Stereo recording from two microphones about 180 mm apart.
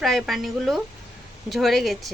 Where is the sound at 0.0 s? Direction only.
Centre (ahead or behind).